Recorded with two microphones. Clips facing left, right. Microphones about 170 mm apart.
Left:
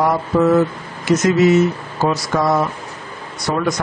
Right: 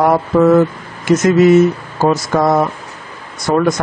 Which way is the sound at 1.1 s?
55° right (ahead or behind).